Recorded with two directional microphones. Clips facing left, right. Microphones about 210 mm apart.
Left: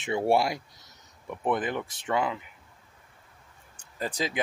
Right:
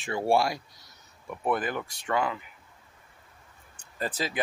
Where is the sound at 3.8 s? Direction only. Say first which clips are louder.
Left 1 dB; 15° left (ahead or behind).